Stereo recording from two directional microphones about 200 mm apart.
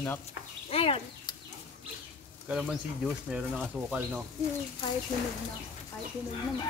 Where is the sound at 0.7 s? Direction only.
30° left (ahead or behind).